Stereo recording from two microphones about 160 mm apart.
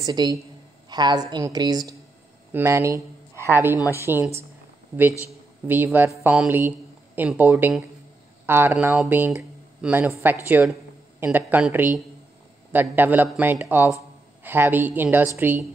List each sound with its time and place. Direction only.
0.0 s a woman's voice: 25° right (ahead or behind)